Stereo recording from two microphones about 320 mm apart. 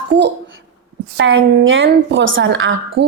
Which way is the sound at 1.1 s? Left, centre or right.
Right.